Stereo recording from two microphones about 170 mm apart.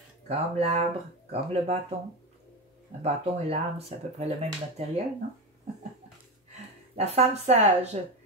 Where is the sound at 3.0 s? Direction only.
40° right (ahead or behind).